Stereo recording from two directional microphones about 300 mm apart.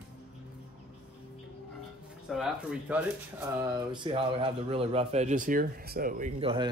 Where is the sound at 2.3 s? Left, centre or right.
Centre.